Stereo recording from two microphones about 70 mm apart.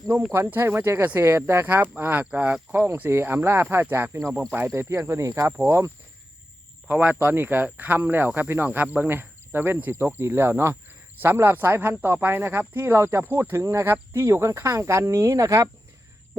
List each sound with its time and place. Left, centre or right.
0.3 s speech: right
2.3 s speech: centre
3.1 s speech: right
7.0 s speech: right